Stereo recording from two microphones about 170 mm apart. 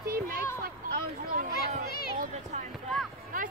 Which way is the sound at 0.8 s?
60° right (ahead or behind).